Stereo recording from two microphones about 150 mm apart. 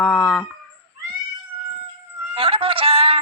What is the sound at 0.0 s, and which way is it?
Chicken, 5° left (ahead or behind).